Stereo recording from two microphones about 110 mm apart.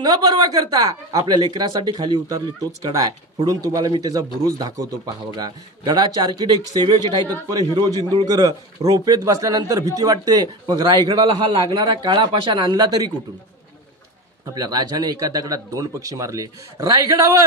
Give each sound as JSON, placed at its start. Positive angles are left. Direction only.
{"t": 0.0, "sound": "speech", "side_deg": -35}
{"t": 14.5, "sound": "speech", "side_deg": -35}